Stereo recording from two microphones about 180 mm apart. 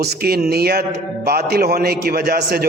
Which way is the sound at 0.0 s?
60° right (ahead or behind).